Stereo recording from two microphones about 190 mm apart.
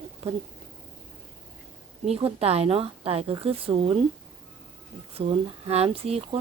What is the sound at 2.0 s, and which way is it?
A woman's voice, 30° right (ahead or behind).